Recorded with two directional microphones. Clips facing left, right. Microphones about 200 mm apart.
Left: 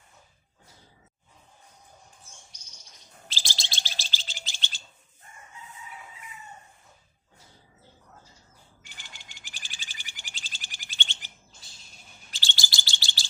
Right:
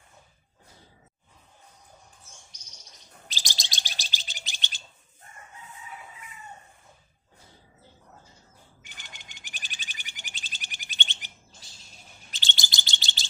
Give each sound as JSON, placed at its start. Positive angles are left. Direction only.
{"t": 3.2, "sound": "bird", "side_deg": -15}
{"t": 8.8, "sound": "bird", "side_deg": -20}
{"t": 12.3, "sound": "chirp", "side_deg": -20}